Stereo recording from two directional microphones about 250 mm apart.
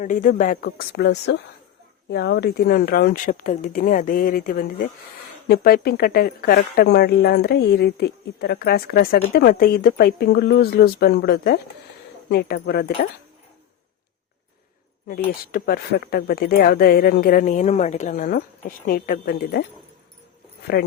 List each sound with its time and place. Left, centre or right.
0.0 s speech: left
15.3 s speech: left
20.7 s speech: left